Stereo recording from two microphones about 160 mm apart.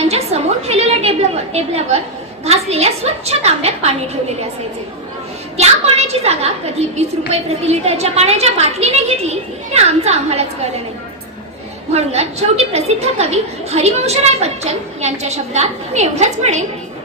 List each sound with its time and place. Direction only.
0.0 s a woman's voice: 40° right (ahead or behind)
5.5 s a woman's voice: 40° right (ahead or behind)
11.9 s a woman's voice: 40° right (ahead or behind)